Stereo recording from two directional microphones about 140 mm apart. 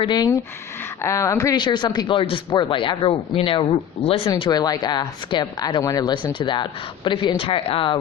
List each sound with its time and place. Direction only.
0.0 s a man's voice: 30° left (ahead or behind)
4.4 s a man's voice: 30° left (ahead or behind)